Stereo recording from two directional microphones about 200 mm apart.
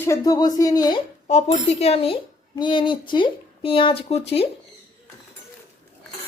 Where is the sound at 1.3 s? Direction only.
30° left (ahead or behind).